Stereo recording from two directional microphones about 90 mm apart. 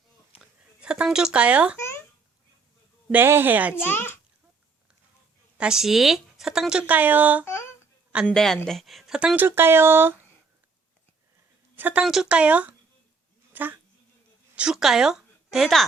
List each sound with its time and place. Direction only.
0.3 s a sound: 10° right (ahead or behind)
3.1 s speech: 25° right (ahead or behind)
3.8 s a child's voice: 25° left (ahead or behind)
5.5 s a woman's voice: 5° right (ahead or behind)
7.4 s humming: 30° left (ahead or behind)
8.3 s speech: 5° left (ahead or behind)
9.1 s a woman's voice: 10° right (ahead or behind)
9.4 s speech: 25° right (ahead or behind)
11.8 s a woman's voice: 20° right (ahead or behind)
12.0 s a woman's voice: 5° right (ahead or behind)
14.5 s a woman's voice: 10° right (ahead or behind)